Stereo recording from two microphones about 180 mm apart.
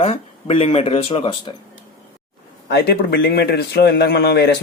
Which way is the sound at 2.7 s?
65° left (ahead or behind).